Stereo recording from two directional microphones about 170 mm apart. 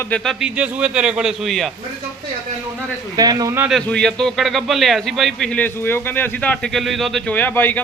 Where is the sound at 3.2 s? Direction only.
20° right (ahead or behind).